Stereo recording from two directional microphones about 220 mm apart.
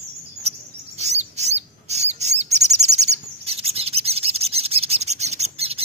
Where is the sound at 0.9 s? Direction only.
30° right (ahead or behind).